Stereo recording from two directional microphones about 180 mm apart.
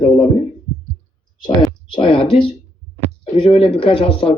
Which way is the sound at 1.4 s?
25° left (ahead or behind).